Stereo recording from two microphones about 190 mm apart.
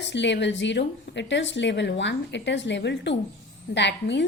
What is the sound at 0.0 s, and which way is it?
A woman's voice, 70° left (ahead or behind).